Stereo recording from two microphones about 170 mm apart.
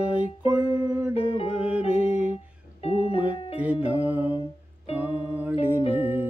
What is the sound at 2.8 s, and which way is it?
Music, 35° left (ahead or behind).